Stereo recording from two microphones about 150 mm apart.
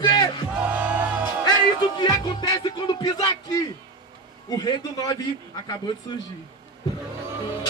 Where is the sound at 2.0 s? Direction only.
30° left (ahead or behind).